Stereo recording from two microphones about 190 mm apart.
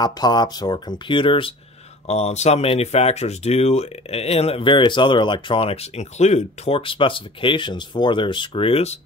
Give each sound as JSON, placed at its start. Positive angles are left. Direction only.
{"t": 0.0, "sound": "speech", "side_deg": 20}